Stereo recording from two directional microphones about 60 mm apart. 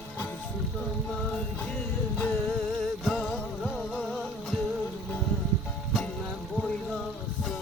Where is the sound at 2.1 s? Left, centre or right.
Left.